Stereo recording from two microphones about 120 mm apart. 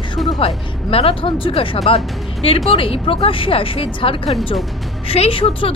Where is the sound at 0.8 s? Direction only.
50° left (ahead or behind).